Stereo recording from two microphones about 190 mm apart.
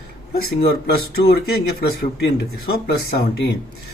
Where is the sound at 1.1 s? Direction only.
60° left (ahead or behind).